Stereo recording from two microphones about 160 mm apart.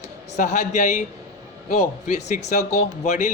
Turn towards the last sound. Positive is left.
turn(degrees=50)  # may be behind; listen again after turning